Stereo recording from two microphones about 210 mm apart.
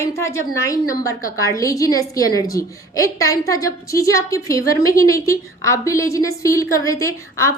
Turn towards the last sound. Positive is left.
turn(degrees=15)  # may be behind; listen again after turning